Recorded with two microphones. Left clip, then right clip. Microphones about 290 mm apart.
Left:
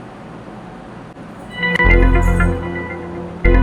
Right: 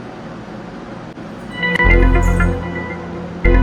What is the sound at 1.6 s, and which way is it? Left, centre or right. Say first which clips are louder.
Music: even; centre.